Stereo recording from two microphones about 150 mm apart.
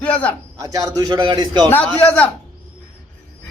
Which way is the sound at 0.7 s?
25° right (ahead or behind).